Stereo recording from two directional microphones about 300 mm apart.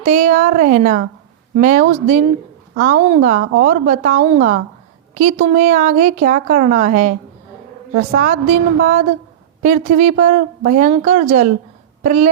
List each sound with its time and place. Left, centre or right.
0.0 s a woman's voice: right